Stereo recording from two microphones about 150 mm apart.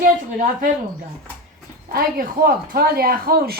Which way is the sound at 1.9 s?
75° right (ahead or behind).